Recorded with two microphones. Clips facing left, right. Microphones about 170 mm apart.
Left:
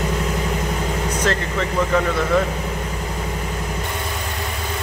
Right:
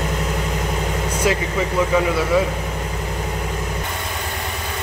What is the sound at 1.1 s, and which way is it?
Speech, 10° right (ahead or behind).